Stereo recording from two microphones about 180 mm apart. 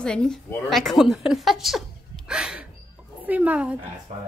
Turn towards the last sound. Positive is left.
turn(degrees=-5)  # may be behind; listen again after turning